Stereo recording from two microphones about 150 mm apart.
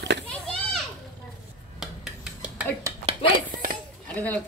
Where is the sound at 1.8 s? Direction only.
5° right (ahead or behind).